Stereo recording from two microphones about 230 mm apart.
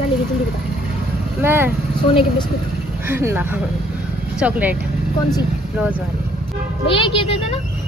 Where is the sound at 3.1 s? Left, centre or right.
Centre.